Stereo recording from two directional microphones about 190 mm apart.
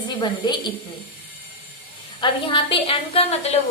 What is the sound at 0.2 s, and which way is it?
Speech, 25° left (ahead or behind).